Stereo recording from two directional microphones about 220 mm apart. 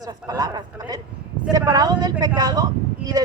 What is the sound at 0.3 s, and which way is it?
A woman's voice, 15° right (ahead or behind).